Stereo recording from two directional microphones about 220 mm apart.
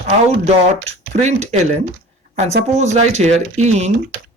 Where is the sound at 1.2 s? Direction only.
30° right (ahead or behind).